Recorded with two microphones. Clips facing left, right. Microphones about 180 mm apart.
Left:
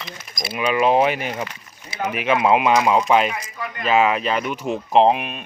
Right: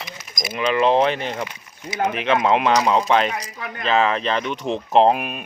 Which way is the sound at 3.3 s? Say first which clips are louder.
Even; 40° right (ahead or behind).